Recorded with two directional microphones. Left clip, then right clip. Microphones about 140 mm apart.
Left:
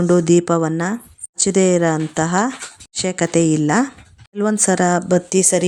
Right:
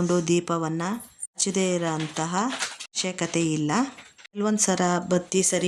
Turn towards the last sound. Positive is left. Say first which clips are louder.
# left 8 dB
turn(degrees=50)  # may be behind; listen again after turning